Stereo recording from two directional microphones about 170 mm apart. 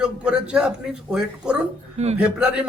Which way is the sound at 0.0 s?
5° right (ahead or behind).